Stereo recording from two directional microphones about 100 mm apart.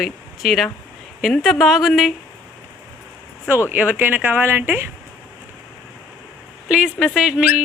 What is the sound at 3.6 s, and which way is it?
Speech, 15° right (ahead or behind).